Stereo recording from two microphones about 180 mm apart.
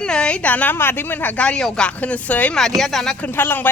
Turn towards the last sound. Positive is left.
turn(degrees=10)  # may be behind; listen again after turning